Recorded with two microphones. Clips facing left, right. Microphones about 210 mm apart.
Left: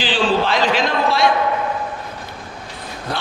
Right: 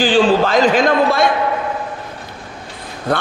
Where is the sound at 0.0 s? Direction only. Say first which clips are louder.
Right 6 dB; 45° right (ahead or behind).